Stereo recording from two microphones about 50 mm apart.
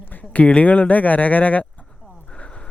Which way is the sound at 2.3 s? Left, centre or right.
Centre.